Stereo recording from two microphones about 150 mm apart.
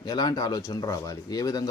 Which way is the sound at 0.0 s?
25° left (ahead or behind).